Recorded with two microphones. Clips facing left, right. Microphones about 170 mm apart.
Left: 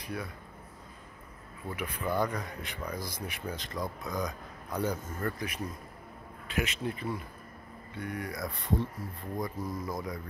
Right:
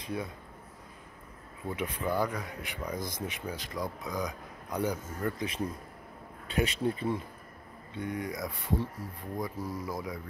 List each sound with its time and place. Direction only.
0.0 s speech: 25° right (ahead or behind)
1.7 s speech: 20° right (ahead or behind)
2.1 s speech: 5° right (ahead or behind)
3.5 s speech: 10° right (ahead or behind)
6.4 s speech: 30° right (ahead or behind); by 10.2 s 10° right (ahead or behind)